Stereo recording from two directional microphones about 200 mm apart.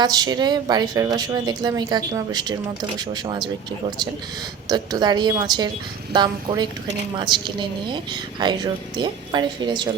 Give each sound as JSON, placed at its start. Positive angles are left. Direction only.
{"t": 0.0, "sound": "a woman's voice", "side_deg": -20}